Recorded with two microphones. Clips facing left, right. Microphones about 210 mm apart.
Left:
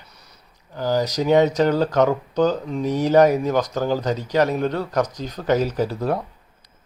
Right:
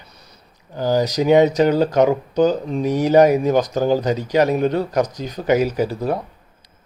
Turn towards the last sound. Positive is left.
turn(degrees=-5)  # may be behind; listen again after turning